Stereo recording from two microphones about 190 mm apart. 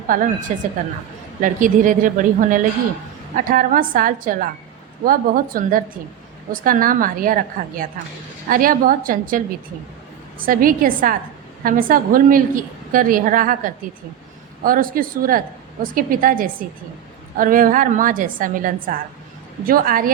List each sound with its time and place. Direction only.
0.1 s a woman's voice: 45° right (ahead or behind)